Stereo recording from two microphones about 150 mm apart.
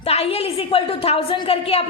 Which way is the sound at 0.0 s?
40° left (ahead or behind).